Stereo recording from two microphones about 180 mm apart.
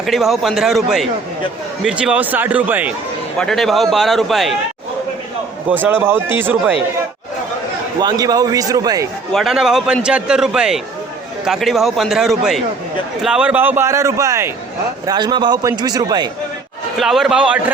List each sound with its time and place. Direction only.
0.0 s a man's voice: centre (ahead or behind)
3.3 s a man's voice: 5° left (ahead or behind)
5.6 s a man's voice: 10° right (ahead or behind)
8.0 s a man's voice: 20° right (ahead or behind)
9.3 s a man's voice: centre (ahead or behind); by 16.3 s 20° right (ahead or behind)
17.0 s a man's voice: centre (ahead or behind)